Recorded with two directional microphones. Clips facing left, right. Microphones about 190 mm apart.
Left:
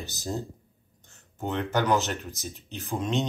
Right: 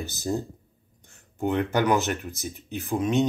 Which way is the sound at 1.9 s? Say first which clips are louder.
Right 2 dB; 55° right (ahead or behind).